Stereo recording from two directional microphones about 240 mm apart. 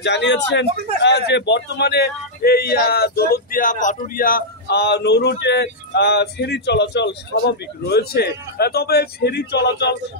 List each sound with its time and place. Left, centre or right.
0.0 s a man's voice: left